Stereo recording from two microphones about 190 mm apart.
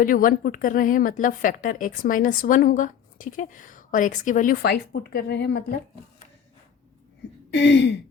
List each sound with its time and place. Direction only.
0.0 s a woman's voice: 45° left (ahead or behind)
7.5 s speech: 65° left (ahead or behind)